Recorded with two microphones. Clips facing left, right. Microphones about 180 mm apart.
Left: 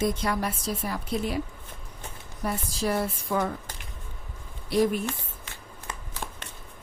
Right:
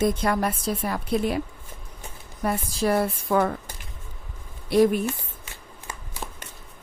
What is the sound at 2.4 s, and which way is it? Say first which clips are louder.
A woman's voice: right 4 dB; 60° right (ahead or behind).